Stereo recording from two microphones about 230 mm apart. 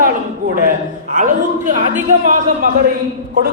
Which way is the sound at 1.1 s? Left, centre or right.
Right.